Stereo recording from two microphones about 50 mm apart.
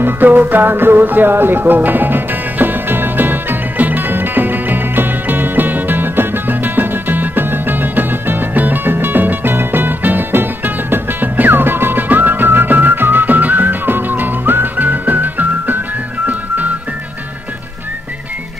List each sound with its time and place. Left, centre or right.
0.0 s music: right